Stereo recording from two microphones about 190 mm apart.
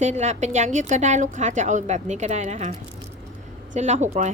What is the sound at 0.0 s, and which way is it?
A woman's voice, 35° right (ahead or behind).